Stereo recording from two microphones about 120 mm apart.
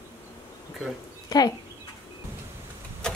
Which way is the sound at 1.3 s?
35° left (ahead or behind).